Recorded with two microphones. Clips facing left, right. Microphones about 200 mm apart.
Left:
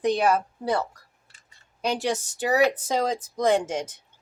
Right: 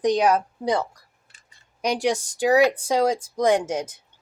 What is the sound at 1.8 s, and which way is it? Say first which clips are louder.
Speech: right 3 dB; 15° right (ahead or behind).